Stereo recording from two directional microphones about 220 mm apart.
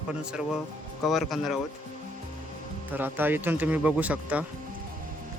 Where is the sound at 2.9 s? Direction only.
10° right (ahead or behind).